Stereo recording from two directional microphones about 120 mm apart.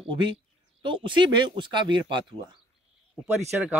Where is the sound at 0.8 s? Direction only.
45° right (ahead or behind).